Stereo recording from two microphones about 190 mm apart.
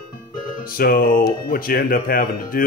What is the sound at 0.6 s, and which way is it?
Speech, 50° left (ahead or behind).